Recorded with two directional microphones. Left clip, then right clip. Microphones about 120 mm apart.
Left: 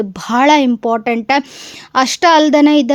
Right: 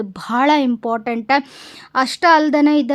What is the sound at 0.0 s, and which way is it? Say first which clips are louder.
Speech: left 5 dB; 35° left (ahead or behind).